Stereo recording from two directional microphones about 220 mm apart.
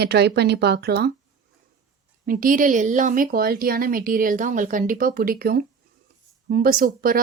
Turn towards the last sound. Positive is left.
turn(degrees=-40)  # may be behind; listen again after turning